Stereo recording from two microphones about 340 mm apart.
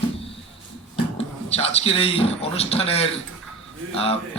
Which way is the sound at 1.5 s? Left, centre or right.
Centre.